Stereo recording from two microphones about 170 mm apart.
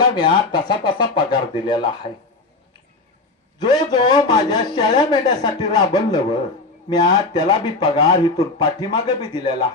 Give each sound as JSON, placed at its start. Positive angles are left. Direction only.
{"t": 0.0, "sound": "speech", "side_deg": 25}
{"t": 3.6, "sound": "speech", "side_deg": 25}